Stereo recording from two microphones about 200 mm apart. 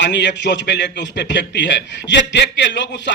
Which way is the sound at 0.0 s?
60° left (ahead or behind).